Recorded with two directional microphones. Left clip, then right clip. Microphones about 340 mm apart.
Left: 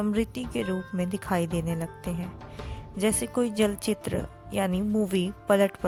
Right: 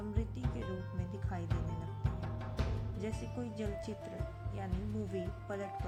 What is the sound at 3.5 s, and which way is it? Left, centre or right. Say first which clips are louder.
Speech: left 15 dB; left.